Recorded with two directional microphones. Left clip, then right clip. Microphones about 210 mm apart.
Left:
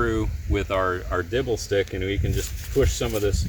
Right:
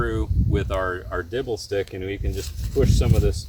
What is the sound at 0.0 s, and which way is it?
Speech, 10° right (ahead or behind).